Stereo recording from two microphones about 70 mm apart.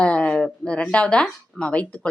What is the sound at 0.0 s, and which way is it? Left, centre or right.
Speech, centre.